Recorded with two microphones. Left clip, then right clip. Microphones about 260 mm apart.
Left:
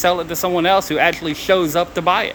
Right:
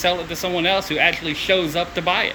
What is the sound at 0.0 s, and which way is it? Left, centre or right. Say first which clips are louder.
Speech: left 4 dB; centre.